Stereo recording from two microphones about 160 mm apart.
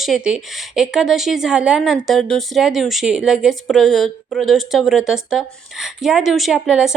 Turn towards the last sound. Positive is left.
turn(degrees=-5)  # may be behind; listen again after turning